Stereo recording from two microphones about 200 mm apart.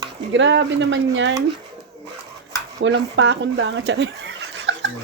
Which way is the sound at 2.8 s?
70° right (ahead or behind).